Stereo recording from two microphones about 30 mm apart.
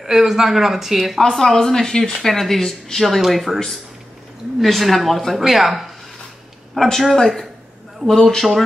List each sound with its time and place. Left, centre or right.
0.0 s speech: centre
1.3 s speech: centre
3.5 s speech: centre
4.6 s speech: centre
6.8 s speech: centre